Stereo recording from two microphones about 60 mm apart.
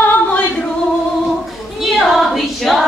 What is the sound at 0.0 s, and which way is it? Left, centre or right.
Singing, left.